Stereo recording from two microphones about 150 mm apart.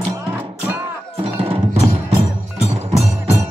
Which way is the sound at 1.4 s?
40° right (ahead or behind).